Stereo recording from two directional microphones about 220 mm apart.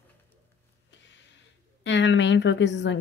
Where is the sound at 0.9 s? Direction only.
55° left (ahead or behind).